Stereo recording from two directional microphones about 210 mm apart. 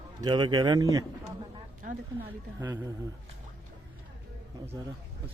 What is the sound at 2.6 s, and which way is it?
Speech, 10° right (ahead or behind).